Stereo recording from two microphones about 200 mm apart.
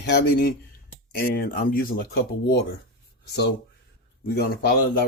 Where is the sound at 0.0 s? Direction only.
55° left (ahead or behind).